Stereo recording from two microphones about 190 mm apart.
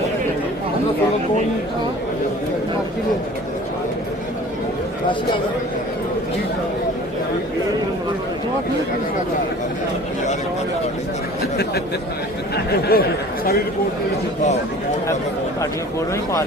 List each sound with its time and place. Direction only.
12.9 s speech: 55° left (ahead or behind)